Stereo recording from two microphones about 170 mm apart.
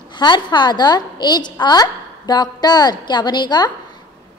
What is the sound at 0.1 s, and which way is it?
A woman's voice, 25° left (ahead or behind).